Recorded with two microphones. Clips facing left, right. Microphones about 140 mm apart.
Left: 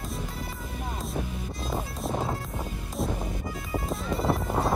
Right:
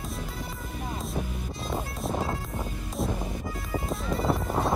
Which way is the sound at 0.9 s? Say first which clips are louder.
Even; centre (ahead or behind).